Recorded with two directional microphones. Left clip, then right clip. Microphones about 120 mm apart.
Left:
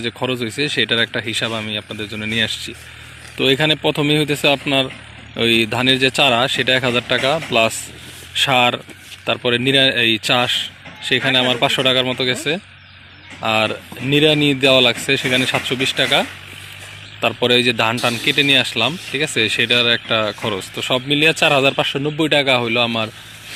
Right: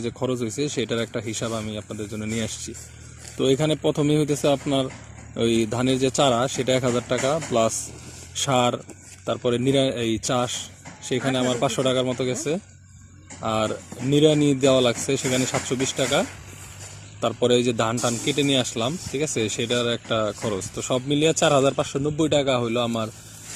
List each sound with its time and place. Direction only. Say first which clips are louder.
0.0 s speech: left 5 dB; 25° right (ahead or behind)
7.2 s speech: left 6 dB; 15° left (ahead or behind)
8.3 s speech: left 7 dB; 20° right (ahead or behind)
13.4 s speech: left 7 dB; 20° right (ahead or behind)
16.0 s speech: left 6 dB; 25° left (ahead or behind)
17.2 s speech: left 5 dB; 20° right (ahead or behind)
17.9 s speech: left 6 dB; 5° right (ahead or behind)
18.3 s speech: left 9 dB; 20° right (ahead or behind)